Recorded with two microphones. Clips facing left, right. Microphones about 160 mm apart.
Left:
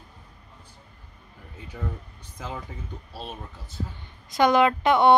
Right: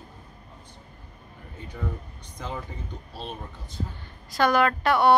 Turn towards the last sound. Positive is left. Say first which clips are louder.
# left 2 dB
turn(degrees=20)  # may be behind; listen again after turning